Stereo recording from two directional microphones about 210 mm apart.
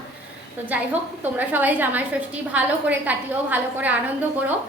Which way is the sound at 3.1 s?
5° right (ahead or behind).